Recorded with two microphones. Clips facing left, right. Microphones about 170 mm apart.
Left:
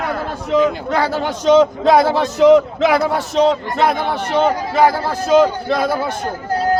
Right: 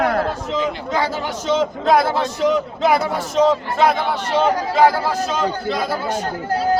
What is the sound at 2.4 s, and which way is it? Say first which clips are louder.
Speech: left 10 dB; 80° left.